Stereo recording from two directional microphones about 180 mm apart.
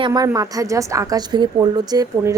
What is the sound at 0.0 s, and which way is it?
Speech, 20° right (ahead or behind).